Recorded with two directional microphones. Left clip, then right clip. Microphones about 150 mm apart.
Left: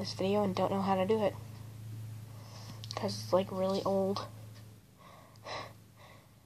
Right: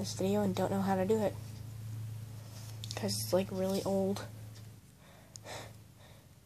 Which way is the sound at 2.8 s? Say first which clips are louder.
Left 2 dB; 25° right (ahead or behind).